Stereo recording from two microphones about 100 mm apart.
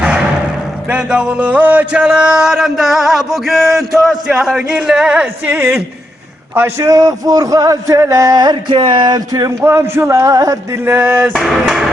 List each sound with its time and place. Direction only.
0.9 s a man's voice: 10° right (ahead or behind); by 9.6 s 35° right (ahead or behind)
9.6 s a sound: 25° right (ahead or behind)
11.3 s speech: centre (ahead or behind)